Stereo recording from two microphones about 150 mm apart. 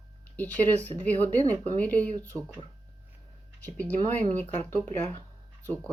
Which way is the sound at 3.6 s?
10° left (ahead or behind).